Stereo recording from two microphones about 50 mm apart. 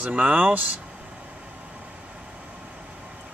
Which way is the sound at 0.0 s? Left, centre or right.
Right.